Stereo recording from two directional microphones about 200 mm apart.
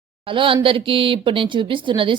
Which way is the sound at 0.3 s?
25° right (ahead or behind).